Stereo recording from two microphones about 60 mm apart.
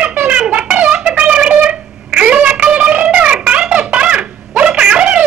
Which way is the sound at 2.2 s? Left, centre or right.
Centre.